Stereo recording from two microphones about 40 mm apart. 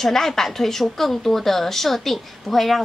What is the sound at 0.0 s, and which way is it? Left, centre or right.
A woman's voice, centre.